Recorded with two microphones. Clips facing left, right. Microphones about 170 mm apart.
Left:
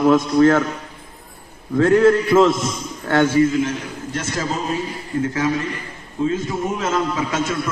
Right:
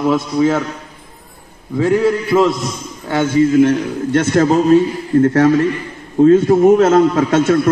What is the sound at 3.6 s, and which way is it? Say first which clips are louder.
A man's voice: right 10 dB; 60° right (ahead or behind).